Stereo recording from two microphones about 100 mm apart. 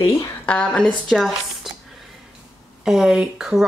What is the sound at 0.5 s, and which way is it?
A woman's voice, 10° left (ahead or behind).